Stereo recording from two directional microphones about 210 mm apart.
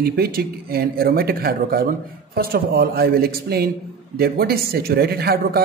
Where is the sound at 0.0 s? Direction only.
45° right (ahead or behind).